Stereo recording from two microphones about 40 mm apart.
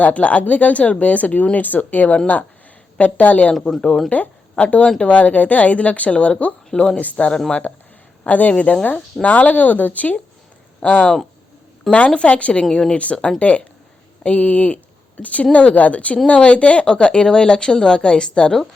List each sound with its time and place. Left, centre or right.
0.0 s speech: left
3.7 s speech: centre
4.6 s speech: left
6.7 s speech: centre
7.0 s speech: left
8.3 s speech: left
10.8 s speech: left